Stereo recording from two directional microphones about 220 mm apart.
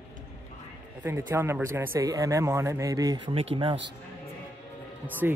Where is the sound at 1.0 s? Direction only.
10° right (ahead or behind).